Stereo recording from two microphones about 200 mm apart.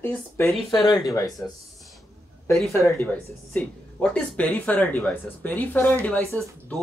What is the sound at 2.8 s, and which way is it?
Speech, 15° left (ahead or behind).